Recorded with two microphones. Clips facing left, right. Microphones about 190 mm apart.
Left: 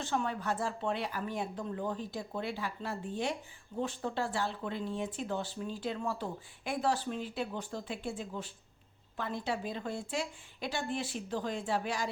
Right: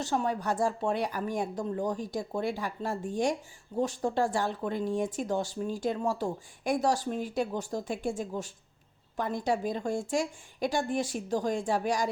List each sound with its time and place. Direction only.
0.0 s speech: 40° right (ahead or behind)